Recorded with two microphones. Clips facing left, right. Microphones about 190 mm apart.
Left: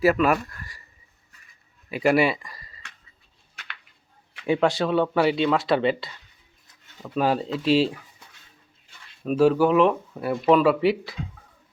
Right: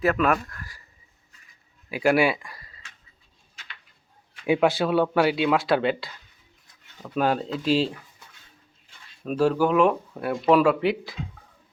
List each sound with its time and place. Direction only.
0.0 s speech: 5° left (ahead or behind)
1.9 s speech: centre (ahead or behind)
3.5 s a sound: 65° left (ahead or behind)
4.4 s speech: 5° right (ahead or behind)
9.2 s speech: 5° left (ahead or behind)